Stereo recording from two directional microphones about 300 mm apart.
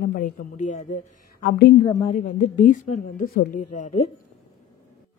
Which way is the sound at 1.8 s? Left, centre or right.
Centre.